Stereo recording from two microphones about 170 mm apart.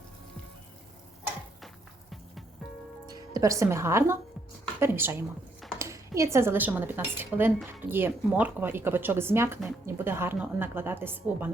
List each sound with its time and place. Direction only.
1.6 s music: centre (ahead or behind)
3.1 s speech: 25° right (ahead or behind)